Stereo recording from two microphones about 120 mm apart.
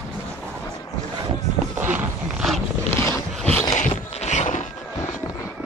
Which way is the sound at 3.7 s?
75° left (ahead or behind).